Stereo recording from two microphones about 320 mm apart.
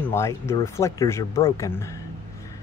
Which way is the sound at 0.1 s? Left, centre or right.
Centre.